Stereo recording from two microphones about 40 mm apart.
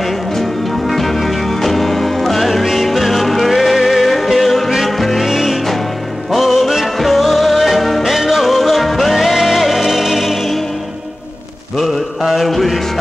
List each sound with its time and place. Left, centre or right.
0.8 s music: centre
11.8 s music: centre